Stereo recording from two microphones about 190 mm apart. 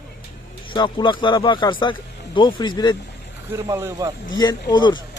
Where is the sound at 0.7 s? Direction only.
25° left (ahead or behind).